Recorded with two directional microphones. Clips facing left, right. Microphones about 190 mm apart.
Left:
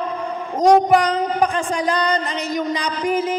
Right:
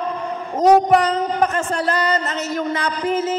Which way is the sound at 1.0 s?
10° left (ahead or behind).